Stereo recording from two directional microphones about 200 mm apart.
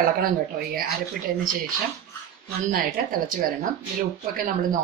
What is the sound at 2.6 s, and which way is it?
Speech, 45° right (ahead or behind).